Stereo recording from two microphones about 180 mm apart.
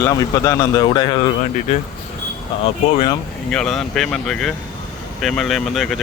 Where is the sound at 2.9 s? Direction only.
25° left (ahead or behind).